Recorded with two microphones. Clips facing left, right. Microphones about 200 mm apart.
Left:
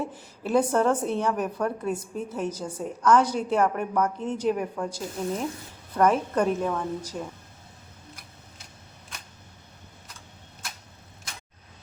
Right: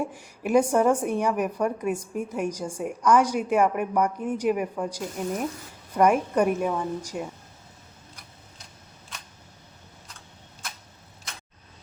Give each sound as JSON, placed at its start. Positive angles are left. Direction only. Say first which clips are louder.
{"t": 0.0, "sound": "a woman's voice", "louder": "right 2 dB", "side_deg": -15}